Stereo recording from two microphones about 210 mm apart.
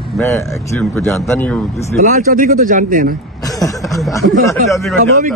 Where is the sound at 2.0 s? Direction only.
40° right (ahead or behind).